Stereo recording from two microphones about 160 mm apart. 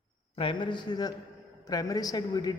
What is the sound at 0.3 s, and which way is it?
A man's voice, 30° left (ahead or behind).